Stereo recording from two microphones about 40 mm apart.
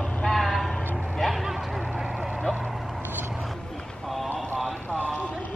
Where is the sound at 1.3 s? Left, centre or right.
Centre.